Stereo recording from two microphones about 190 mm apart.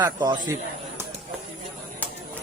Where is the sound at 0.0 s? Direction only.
20° right (ahead or behind).